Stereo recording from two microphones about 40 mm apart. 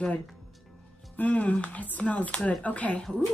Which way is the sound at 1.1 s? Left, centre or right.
Left.